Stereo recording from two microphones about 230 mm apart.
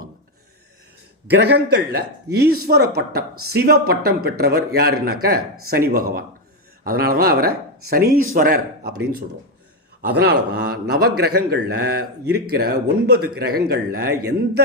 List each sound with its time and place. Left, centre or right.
1.3 s a man's voice: right
10.5 s a man's voice: right